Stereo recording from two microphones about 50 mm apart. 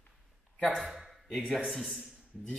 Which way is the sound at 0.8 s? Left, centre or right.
Centre.